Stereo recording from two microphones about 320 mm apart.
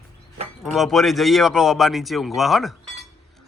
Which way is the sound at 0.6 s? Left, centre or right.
Centre.